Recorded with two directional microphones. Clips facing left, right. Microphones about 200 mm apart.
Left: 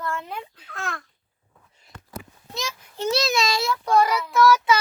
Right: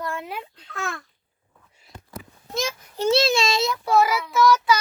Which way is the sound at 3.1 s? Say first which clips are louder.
Right 3 dB; 25° right (ahead or behind).